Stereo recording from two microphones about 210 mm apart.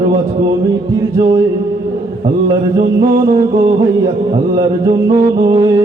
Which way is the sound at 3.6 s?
20° right (ahead or behind).